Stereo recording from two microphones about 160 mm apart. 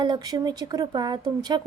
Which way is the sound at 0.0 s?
25° right (ahead or behind).